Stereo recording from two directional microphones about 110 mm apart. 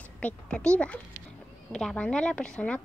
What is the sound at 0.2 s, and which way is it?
A woman's voice, 10° left (ahead or behind).